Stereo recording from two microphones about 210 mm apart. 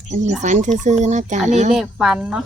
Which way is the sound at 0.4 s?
35° right (ahead or behind).